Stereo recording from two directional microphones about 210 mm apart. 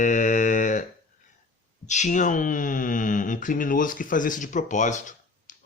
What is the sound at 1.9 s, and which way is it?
Speech, 35° left (ahead or behind).